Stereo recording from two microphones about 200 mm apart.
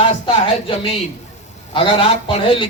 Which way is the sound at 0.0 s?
30° left (ahead or behind).